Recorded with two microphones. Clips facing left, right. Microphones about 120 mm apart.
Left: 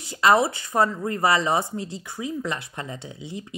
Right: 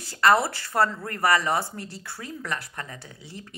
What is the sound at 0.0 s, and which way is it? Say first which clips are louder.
Speech: left 2 dB; 20° left (ahead or behind).